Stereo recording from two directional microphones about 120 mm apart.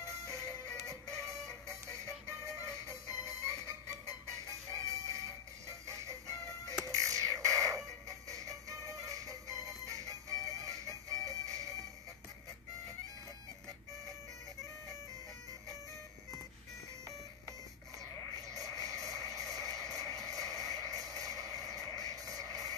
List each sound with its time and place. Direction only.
0.8 s music: 25° right (ahead or behind)
18.5 s a sound: 30° right (ahead or behind)
21.9 s music: 30° right (ahead or behind)